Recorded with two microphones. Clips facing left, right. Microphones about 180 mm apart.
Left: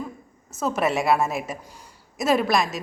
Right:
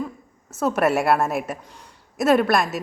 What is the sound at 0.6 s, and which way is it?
A woman's voice, 5° right (ahead or behind).